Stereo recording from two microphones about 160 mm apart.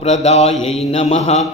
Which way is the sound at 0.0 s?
45° left (ahead or behind).